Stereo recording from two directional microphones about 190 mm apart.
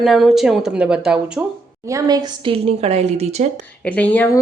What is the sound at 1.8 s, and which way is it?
A woman's voice, 15° right (ahead or behind).